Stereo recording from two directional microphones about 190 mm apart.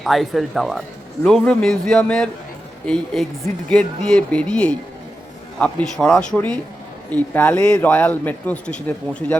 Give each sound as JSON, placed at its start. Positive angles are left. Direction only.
{"t": 0.0, "sound": "a man's voice", "side_deg": 0}